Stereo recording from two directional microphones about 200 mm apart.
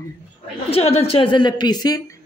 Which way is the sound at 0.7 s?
30° left (ahead or behind).